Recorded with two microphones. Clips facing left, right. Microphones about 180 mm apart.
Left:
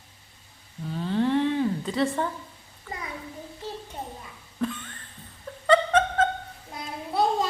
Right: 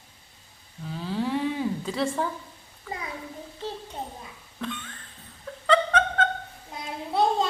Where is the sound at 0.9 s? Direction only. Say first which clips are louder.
Left 4 dB; centre (ahead or behind).